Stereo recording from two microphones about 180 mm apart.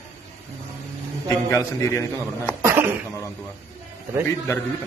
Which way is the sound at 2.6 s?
15° right (ahead or behind).